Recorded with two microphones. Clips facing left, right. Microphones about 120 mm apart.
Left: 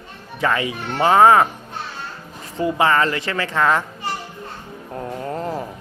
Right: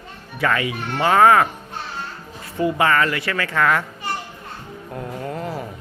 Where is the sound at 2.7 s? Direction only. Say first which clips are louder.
Left 2 dB; 20° left (ahead or behind).